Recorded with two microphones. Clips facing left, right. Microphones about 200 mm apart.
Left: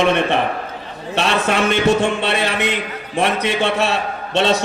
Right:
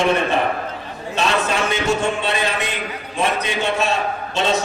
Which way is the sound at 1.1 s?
65° left (ahead or behind).